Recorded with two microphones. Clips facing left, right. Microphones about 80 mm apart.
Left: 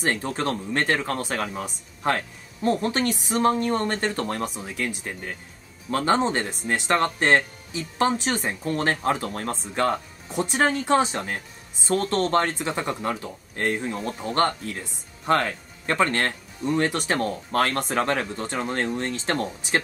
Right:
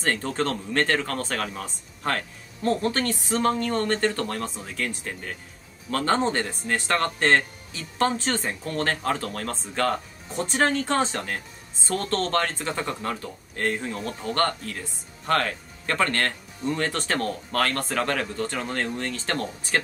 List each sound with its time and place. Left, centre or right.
0.0 s speech: centre